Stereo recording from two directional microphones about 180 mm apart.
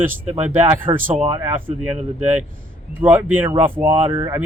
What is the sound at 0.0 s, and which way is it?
Speech, 10° right (ahead or behind).